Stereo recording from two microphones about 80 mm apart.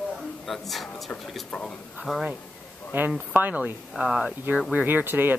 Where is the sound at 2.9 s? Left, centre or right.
Right.